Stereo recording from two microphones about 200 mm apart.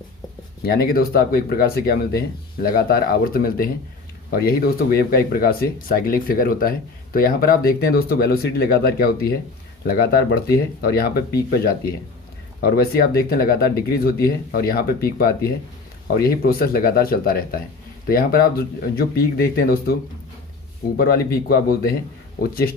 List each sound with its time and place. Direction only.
0.6 s speech: 50° left (ahead or behind)
12.5 s speech: 50° left (ahead or behind)